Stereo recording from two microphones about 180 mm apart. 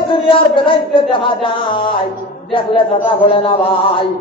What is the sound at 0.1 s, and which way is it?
A man's voice, 30° left (ahead or behind).